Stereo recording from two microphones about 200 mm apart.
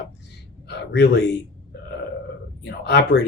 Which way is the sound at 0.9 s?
55° left (ahead or behind).